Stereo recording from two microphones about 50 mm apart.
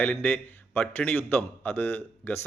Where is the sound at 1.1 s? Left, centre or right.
Left.